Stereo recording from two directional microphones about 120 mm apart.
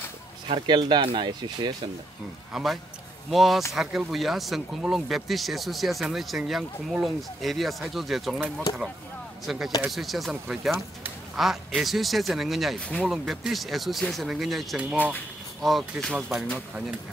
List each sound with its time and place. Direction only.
0.5 s speech: 40° right (ahead or behind)
2.5 s speech: centre (ahead or behind)
9.5 s speech: centre (ahead or behind)
12.8 s speech: 10° left (ahead or behind)
13.1 s speech: 5° right (ahead or behind)